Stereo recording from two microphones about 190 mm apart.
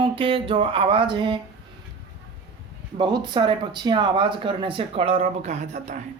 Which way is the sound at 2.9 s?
25° right (ahead or behind).